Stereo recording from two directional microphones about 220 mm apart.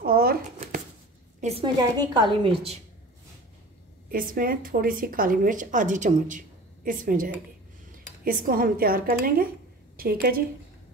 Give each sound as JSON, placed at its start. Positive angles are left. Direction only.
{"t": 0.0, "sound": "shuffling cards", "side_deg": -45}
{"t": 1.4, "sound": "a woman's voice", "side_deg": -25}
{"t": 4.1, "sound": "a woman's voice", "side_deg": -40}